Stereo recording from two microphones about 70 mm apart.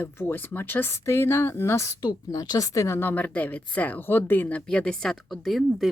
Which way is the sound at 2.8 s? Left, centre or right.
Left.